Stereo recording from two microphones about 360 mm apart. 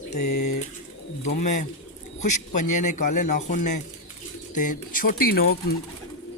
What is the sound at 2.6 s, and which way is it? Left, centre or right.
Speech, left.